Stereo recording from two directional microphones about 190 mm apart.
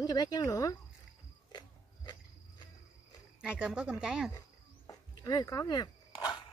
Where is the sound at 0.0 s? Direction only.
20° left (ahead or behind).